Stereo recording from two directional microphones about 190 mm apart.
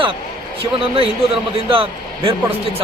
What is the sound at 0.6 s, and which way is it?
Speech, 30° right (ahead or behind).